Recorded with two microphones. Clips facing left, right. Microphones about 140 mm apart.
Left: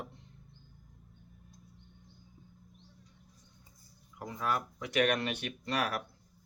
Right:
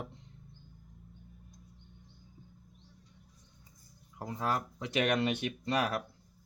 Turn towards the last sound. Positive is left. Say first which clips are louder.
# right 2 dB
turn(degrees=-25)  # may be behind; listen again after turning